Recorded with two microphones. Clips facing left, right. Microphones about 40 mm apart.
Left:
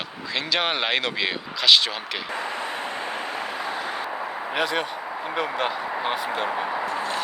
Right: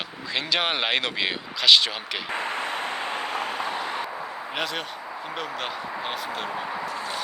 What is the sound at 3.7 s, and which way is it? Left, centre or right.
Vehicle, left.